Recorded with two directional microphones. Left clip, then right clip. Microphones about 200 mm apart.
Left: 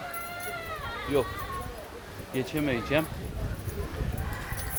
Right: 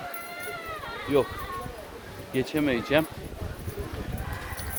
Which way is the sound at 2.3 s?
30° right (ahead or behind).